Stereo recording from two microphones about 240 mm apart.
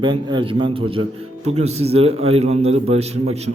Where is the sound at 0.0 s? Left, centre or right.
Centre.